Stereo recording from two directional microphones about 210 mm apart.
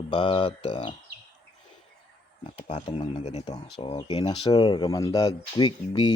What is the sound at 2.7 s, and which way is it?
Speech, 30° left (ahead or behind).